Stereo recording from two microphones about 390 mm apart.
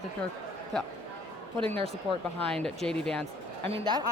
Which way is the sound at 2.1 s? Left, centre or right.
Centre.